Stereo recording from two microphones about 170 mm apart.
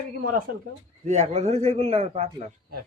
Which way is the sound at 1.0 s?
40° right (ahead or behind).